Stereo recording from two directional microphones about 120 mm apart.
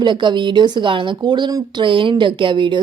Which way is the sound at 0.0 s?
40° right (ahead or behind).